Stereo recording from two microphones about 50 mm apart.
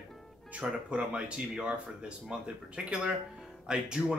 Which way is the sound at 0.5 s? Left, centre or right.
Right.